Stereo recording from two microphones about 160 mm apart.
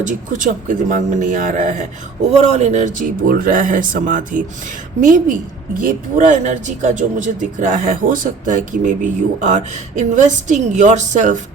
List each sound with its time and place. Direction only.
0.0 s speech: 55° right (ahead or behind)